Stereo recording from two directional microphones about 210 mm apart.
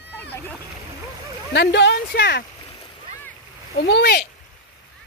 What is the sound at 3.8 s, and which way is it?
Speech, 55° left (ahead or behind).